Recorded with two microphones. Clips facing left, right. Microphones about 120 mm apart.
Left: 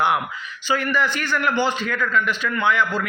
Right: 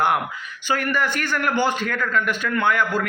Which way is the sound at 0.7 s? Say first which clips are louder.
Left 1 dB; 50° right (ahead or behind).